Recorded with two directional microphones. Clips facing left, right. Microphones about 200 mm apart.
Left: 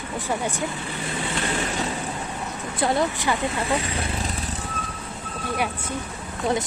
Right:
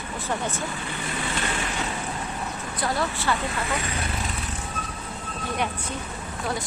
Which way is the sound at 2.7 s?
25° left (ahead or behind).